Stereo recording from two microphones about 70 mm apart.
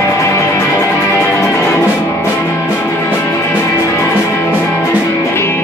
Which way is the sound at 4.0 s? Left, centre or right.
Left.